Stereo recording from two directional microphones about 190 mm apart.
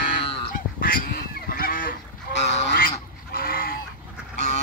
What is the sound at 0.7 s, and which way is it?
Goose, 50° left (ahead or behind).